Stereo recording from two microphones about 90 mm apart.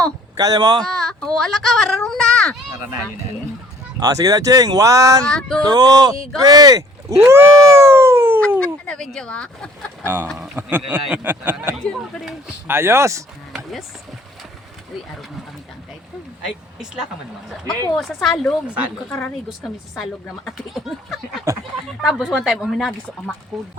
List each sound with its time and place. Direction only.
0.3 s a sound: 45° right (ahead or behind)
1.2 s speech: 5° left (ahead or behind)
4.0 s speech: 40° right (ahead or behind)
5.2 s female singing: 10° left (ahead or behind)
5.6 s a sound: 45° right (ahead or behind)
6.3 s speech: 45° right (ahead or behind)
7.9 s howl: 30° right (ahead or behind)
8.4 s speech: 10° left (ahead or behind)
10.0 s speech: 20° right (ahead or behind)
12.6 s speech: 30° right (ahead or behind)
16.7 s speech: 5° right (ahead or behind)